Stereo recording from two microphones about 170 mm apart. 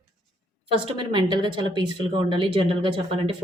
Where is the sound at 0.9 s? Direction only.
30° right (ahead or behind).